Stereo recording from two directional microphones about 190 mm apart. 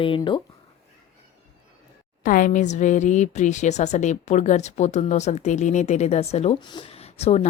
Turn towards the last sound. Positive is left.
turn(degrees=35)  # may be behind; listen again after turning